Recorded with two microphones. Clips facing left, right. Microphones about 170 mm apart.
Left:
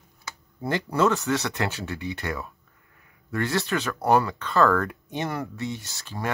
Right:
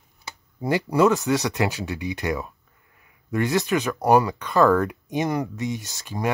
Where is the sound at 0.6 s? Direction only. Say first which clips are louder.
Right 4 dB; 10° right (ahead or behind).